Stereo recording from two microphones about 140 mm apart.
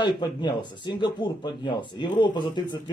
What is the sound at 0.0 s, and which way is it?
Speech, 35° left (ahead or behind).